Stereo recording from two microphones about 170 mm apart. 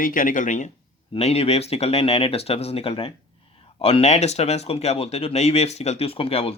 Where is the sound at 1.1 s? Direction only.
35° left (ahead or behind).